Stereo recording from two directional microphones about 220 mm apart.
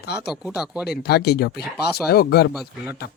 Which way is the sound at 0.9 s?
45° left (ahead or behind).